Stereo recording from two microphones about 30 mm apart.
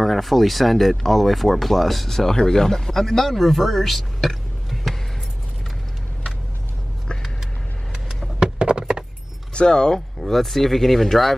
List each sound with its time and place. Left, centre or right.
0.0 s speech: centre
8.4 s a sound: right
9.5 s speech: left
9.9 s speech: centre